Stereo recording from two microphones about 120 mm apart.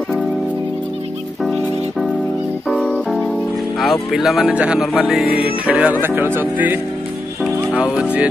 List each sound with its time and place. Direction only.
1.4 s music: centre (ahead or behind)
3.8 s speech: centre (ahead or behind)